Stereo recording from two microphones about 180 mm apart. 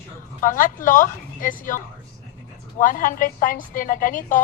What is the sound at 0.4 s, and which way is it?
A woman's voice, 50° left (ahead or behind).